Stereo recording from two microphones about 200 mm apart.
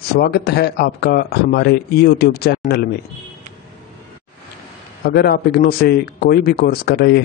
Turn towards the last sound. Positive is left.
turn(degrees=50)  # may be behind; listen again after turning